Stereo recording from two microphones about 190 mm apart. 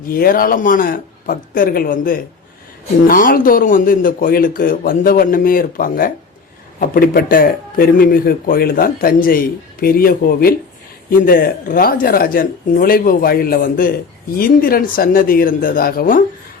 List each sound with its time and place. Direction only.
0.1 s speech: 50° left (ahead or behind)